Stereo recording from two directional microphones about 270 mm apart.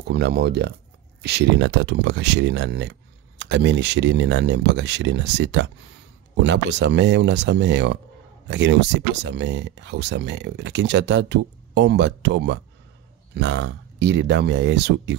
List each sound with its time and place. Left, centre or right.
0.1 s speech: right